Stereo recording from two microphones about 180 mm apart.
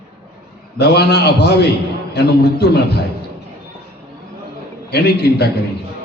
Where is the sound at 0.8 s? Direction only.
65° left (ahead or behind).